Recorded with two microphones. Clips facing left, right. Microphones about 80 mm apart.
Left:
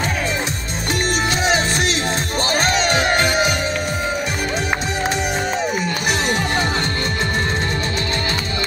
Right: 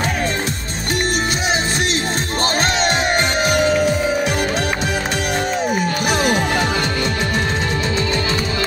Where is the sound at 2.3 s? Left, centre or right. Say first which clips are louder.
Right 1 dB; right.